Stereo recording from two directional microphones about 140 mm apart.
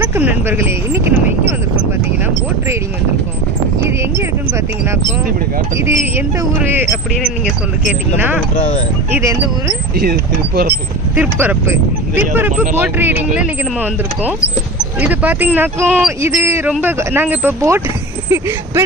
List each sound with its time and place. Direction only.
0.0 s speech: 15° right (ahead or behind)
5.7 s speech: 20° right (ahead or behind)
8.5 s speech: 60° left (ahead or behind)
9.1 s speech: 20° right (ahead or behind)
9.9 s speech: 90° right
11.1 s speech: 15° right (ahead or behind)
16.2 s speech: 20° right (ahead or behind)